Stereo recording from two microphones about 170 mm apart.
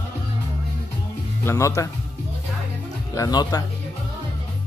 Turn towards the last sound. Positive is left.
turn(degrees=25)  # may be behind; listen again after turning